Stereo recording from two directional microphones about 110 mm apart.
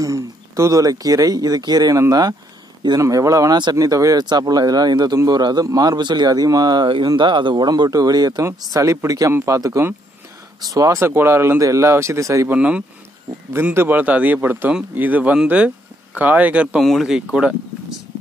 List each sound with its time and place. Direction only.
0.0 s speech: 30° right (ahead or behind)
12.4 s speech: 10° right (ahead or behind)
16.8 s speech: centre (ahead or behind)